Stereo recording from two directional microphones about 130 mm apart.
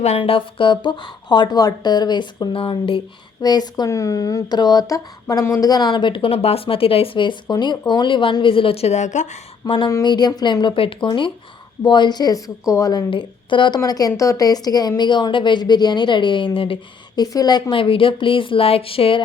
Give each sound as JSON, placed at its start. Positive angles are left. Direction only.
{"t": 0.2, "sound": "speech", "side_deg": 40}
{"t": 3.4, "sound": "speech", "side_deg": 30}
{"t": 9.6, "sound": "speech", "side_deg": 40}
{"t": 13.1, "sound": "speech", "side_deg": 40}
{"t": 17.2, "sound": "a woman's voice", "side_deg": 30}